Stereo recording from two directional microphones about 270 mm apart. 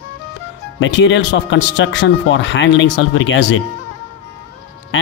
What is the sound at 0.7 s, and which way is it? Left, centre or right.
Speech, left.